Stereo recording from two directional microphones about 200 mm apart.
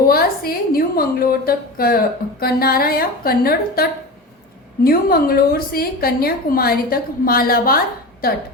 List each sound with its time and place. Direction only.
0.1 s a woman's voice: 50° left (ahead or behind)